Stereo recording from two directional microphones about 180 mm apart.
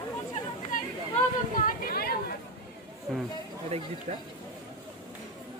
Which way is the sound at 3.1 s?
Centre (ahead or behind).